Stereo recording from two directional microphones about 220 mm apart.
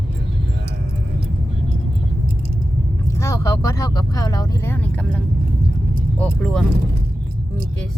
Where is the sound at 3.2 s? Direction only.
15° left (ahead or behind).